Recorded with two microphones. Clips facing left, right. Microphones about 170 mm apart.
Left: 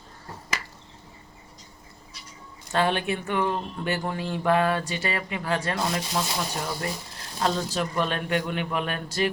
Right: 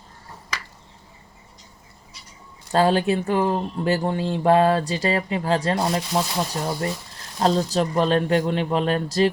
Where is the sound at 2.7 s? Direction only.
35° right (ahead or behind).